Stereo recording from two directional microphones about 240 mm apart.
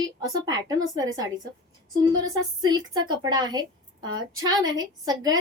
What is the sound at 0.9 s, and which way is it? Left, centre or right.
A woman's voice, centre.